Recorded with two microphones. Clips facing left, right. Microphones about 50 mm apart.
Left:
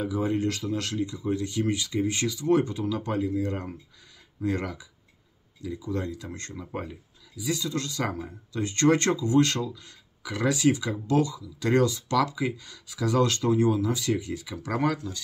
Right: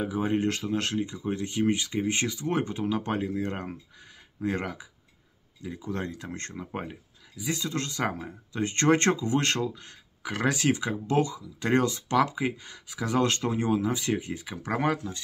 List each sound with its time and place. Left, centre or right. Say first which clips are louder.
0.0 s speech: even; right